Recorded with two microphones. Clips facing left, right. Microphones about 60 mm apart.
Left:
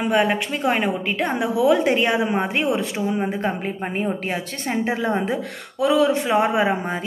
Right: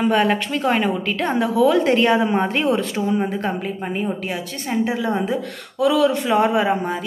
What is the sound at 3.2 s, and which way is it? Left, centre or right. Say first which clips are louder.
A woman's voice: even; left.